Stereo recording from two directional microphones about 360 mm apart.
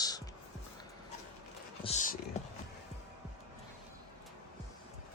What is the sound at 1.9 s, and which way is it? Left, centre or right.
Speech, centre.